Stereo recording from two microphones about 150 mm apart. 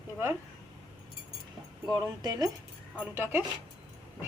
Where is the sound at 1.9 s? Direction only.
25° right (ahead or behind).